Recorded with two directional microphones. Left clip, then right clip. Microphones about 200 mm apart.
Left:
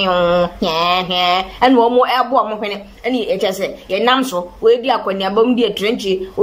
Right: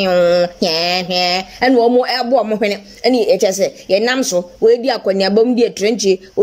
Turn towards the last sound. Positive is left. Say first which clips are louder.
# right 1 dB
turn(degrees=-40)  # may be behind; listen again after turning